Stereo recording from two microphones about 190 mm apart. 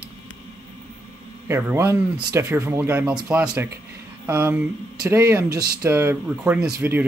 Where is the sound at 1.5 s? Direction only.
15° right (ahead or behind).